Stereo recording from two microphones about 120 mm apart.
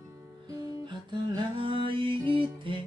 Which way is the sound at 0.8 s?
40° right (ahead or behind).